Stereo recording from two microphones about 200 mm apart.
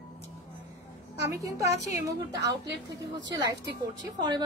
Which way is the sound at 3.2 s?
60° right (ahead or behind).